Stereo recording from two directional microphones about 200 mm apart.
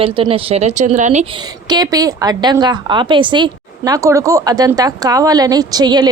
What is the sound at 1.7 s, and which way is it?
A woman's voice, 20° right (ahead or behind).